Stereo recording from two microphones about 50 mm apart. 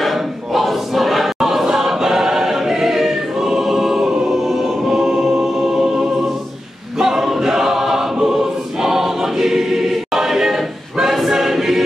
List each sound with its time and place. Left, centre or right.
0.0 s choir: centre
7.0 s choir: centre